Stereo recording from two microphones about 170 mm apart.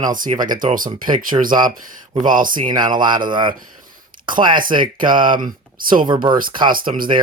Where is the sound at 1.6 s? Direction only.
50° right (ahead or behind).